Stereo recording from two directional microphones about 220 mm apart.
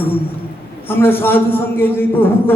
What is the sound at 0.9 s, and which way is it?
A man's voice, 10° left (ahead or behind).